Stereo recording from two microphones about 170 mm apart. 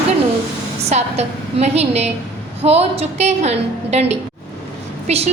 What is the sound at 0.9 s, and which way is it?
A woman's voice, 40° right (ahead or behind).